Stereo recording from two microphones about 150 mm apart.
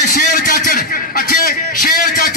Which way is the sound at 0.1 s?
80° left.